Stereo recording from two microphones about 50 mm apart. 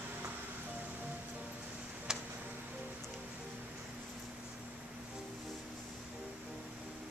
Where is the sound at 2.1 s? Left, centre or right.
Centre.